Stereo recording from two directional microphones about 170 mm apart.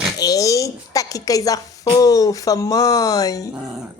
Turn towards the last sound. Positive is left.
turn(degrees=20)  # may be behind; listen again after turning